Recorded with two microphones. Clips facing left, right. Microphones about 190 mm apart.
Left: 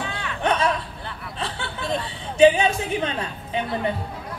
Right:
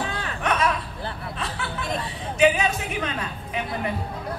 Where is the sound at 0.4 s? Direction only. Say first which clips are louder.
Left 2 dB; 30° left (ahead or behind).